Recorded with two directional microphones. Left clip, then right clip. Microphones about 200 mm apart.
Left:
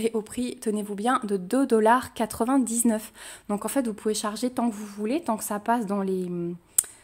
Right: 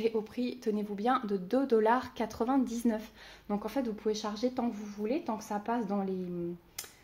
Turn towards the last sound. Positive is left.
turn(degrees=55)  # may be behind; listen again after turning